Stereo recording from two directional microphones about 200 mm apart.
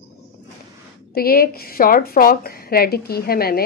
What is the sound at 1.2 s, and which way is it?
Speech, 50° left (ahead or behind).